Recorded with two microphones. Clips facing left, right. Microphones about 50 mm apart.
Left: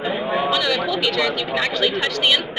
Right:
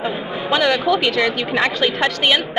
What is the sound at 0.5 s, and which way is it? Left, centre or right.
A woman's voice, right.